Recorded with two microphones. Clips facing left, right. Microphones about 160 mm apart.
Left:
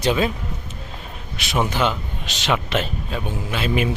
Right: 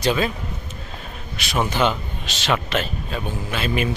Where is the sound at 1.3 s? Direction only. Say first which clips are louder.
Even; 15° left (ahead or behind).